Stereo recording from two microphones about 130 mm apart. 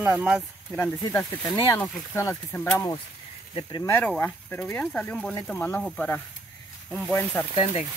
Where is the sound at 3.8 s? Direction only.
20° left (ahead or behind).